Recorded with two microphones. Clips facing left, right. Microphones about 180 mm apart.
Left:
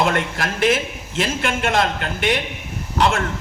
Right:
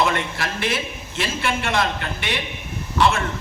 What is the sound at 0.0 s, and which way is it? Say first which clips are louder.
A man's voice: left 2 dB; 50° left (ahead or behind).